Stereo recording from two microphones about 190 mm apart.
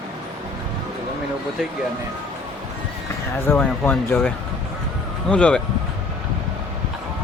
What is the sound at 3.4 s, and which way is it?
Speech, 10° left (ahead or behind).